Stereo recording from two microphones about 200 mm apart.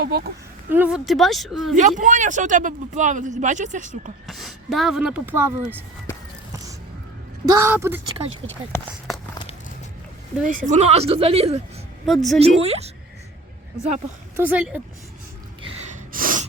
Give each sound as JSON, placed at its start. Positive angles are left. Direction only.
{"t": 0.7, "sound": "speech", "side_deg": -5}
{"t": 1.7, "sound": "speech", "side_deg": -40}
{"t": 4.3, "sound": "speech", "side_deg": 0}
{"t": 7.4, "sound": "speech", "side_deg": -15}
{"t": 10.4, "sound": "speech", "side_deg": -40}
{"t": 12.0, "sound": "speech", "side_deg": 0}
{"t": 12.4, "sound": "speech", "side_deg": -30}
{"t": 14.3, "sound": "speech", "side_deg": -10}
{"t": 16.1, "sound": "gasp", "side_deg": -40}